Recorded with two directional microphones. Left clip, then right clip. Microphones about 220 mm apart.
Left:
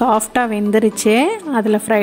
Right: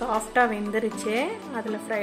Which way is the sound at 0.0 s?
45° left (ahead or behind).